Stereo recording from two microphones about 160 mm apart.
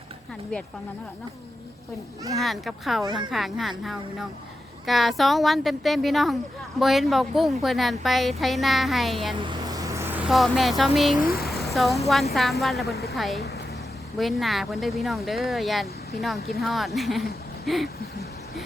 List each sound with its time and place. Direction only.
2.4 s speech: centre (ahead or behind)
3.0 s a woman's voice: 25° right (ahead or behind)
3.2 s speech: centre (ahead or behind)
9.4 s speech: 25° right (ahead or behind); by 11.2 s centre (ahead or behind)
11.2 s speech: 70° left (ahead or behind)
11.6 s a woman's voice: centre (ahead or behind)